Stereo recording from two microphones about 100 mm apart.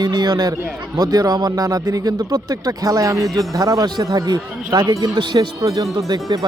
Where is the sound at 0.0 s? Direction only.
45° right (ahead or behind).